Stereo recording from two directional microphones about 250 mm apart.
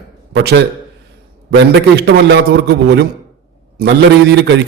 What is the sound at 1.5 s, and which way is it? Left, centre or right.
A man's voice, right.